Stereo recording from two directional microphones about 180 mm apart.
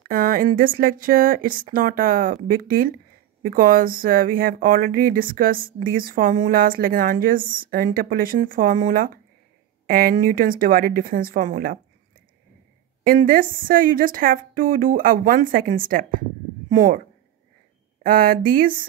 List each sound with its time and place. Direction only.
0.0 s speech: 55° right (ahead or behind)
13.0 s speech: 50° right (ahead or behind)
18.0 s speech: 50° right (ahead or behind)